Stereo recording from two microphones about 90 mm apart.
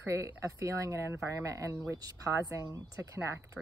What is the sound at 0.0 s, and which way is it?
Speech, 35° right (ahead or behind).